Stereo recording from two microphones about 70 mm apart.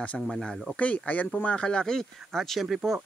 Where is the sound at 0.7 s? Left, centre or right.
Left.